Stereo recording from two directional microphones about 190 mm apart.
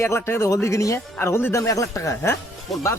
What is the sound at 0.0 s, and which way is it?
Speech, 15° left (ahead or behind).